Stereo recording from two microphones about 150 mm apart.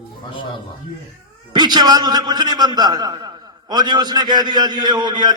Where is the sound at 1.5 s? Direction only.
30° right (ahead or behind).